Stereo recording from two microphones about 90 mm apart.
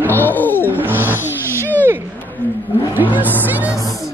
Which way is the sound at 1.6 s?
20° left (ahead or behind).